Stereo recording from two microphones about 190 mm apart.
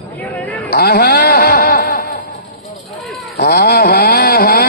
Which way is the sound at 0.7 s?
55° left (ahead or behind).